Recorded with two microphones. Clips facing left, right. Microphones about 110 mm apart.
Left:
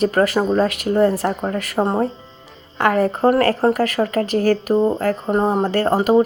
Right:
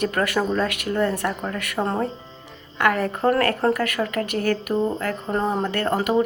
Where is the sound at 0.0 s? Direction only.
30° left (ahead or behind).